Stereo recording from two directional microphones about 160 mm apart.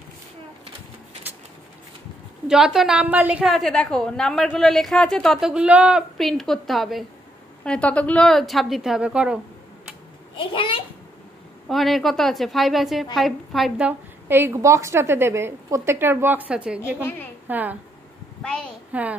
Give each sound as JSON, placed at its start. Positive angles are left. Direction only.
{"t": 2.4, "sound": "a woman's voice", "side_deg": -5}
{"t": 10.3, "sound": "a child's voice", "side_deg": 30}
{"t": 11.7, "sound": "a woman's voice", "side_deg": 0}
{"t": 18.9, "sound": "a child's voice", "side_deg": -10}